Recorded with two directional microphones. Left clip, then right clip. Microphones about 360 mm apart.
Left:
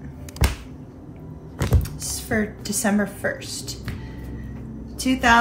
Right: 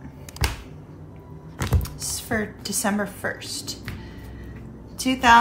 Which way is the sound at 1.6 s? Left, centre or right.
Centre.